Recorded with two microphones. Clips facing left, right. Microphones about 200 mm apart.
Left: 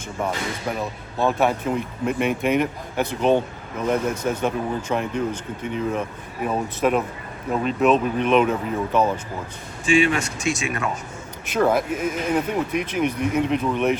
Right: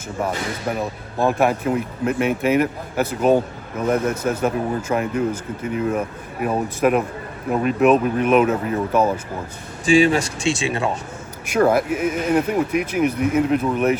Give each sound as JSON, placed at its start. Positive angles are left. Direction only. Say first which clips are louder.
{"t": 0.8, "sound": "speech", "louder": "right 2 dB", "side_deg": -10}
{"t": 9.8, "sound": "speech", "louder": "right 4 dB", "side_deg": -35}
{"t": 11.4, "sound": "speech", "louder": "right 3 dB", "side_deg": -5}